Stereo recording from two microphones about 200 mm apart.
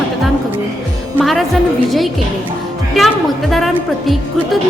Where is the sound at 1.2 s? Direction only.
Centre (ahead or behind).